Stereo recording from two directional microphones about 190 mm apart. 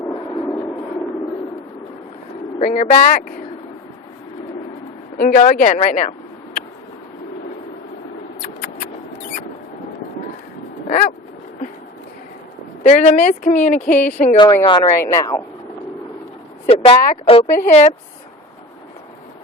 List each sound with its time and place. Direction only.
0.0 s a sound: 15° left (ahead or behind)
2.6 s speech: 40° left (ahead or behind)
5.1 s speech: 45° left (ahead or behind)
10.8 s a sound: 40° left (ahead or behind)
12.8 s speech: 35° left (ahead or behind)
14.3 s speech: 25° left (ahead or behind)
16.6 s speech: 30° left (ahead or behind)